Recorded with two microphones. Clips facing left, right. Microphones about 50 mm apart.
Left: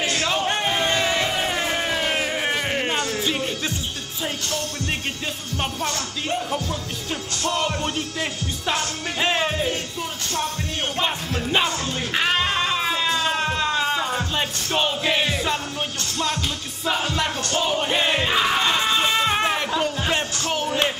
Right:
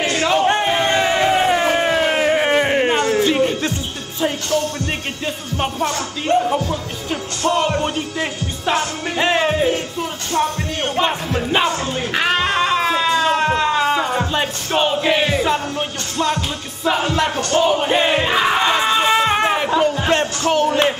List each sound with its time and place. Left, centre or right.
0.0 s crowd: centre
0.4 s crowd: right
5.6 s speech: centre
6.5 s music: centre
11.0 s music: centre
14.3 s music: centre
17.4 s a sound: centre
19.0 s music: centre